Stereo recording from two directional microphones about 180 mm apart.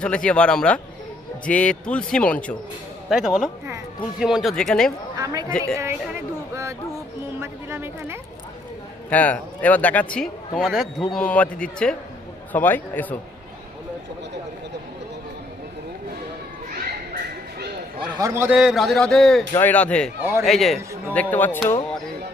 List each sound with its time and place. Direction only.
0.0 s a man's voice: 5° left (ahead or behind)
5.1 s a woman's voice: 20° right (ahead or behind)
7.3 s music: 15° right (ahead or behind)
9.0 s a man's voice: 10° left (ahead or behind)
17.9 s a man's voice: 25° right (ahead or behind); by 21.6 s 10° left (ahead or behind)